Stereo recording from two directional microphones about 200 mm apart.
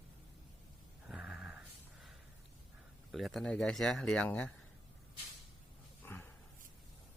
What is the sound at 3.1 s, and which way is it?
Speech, centre (ahead or behind).